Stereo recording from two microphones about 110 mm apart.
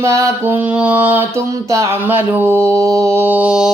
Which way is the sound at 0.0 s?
30° right (ahead or behind).